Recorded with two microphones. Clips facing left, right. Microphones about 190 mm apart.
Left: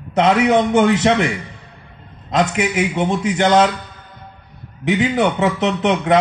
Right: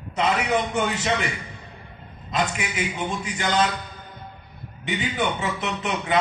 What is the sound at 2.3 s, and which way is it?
A man's voice, 85° left.